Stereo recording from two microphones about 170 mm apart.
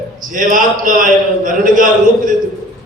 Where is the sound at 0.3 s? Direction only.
50° right (ahead or behind).